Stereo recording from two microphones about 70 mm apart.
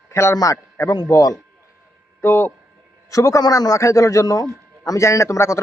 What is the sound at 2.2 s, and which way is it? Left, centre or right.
Speech, left.